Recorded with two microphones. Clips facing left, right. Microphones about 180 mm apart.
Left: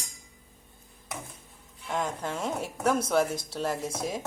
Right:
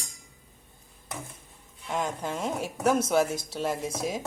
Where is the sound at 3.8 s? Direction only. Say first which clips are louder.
Right 2 dB; 30° left (ahead or behind).